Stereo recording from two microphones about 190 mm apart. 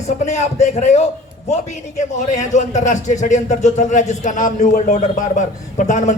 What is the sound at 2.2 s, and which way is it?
A man's voice, 40° left (ahead or behind).